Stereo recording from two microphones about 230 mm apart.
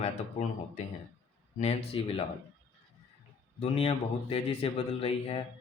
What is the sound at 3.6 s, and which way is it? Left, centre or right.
Speech, left.